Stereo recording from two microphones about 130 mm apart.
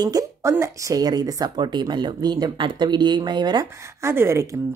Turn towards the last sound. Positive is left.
turn(degrees=-20)  # may be behind; listen again after turning